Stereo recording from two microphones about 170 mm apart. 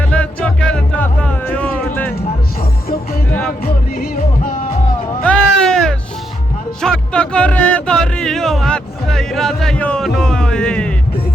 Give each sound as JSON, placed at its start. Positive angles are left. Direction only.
{"t": 0.0, "sound": "music", "side_deg": 5}
{"t": 3.6, "sound": "music", "side_deg": 60}
{"t": 5.2, "sound": "music", "side_deg": 5}